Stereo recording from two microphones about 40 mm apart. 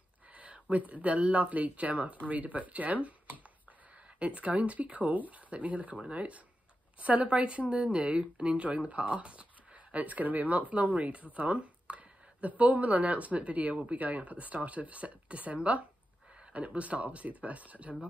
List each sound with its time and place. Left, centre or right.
0.3 s a woman's voice: right
8.5 s speech: right